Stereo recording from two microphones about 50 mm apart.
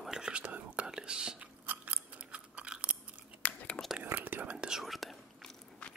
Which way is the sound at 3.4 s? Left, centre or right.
Left.